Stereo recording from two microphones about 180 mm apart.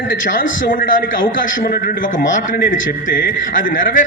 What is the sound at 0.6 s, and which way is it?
A man's voice, 50° left (ahead or behind).